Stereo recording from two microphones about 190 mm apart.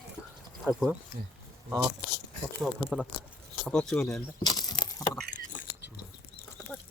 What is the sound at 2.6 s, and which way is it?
Speech, 5° right (ahead or behind).